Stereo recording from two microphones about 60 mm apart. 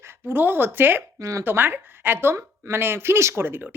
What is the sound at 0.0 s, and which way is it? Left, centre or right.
Speech, right.